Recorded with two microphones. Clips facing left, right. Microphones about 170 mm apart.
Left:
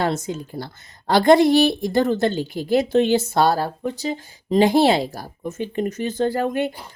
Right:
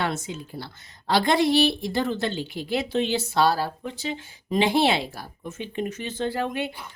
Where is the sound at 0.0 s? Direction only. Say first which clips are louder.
Left 5 dB; 40° left (ahead or behind).